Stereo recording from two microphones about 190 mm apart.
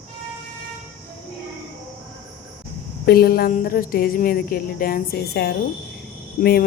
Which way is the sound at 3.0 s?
55° left (ahead or behind).